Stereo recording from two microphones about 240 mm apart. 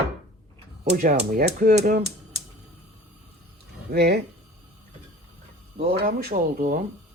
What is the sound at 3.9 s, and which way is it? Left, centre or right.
Speech, right.